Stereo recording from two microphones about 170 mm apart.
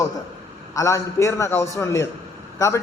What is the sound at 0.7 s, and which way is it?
A man's voice, 20° left (ahead or behind).